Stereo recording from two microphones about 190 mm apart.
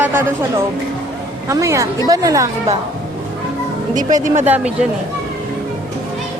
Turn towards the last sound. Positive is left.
turn(degrees=-5)  # may be behind; listen again after turning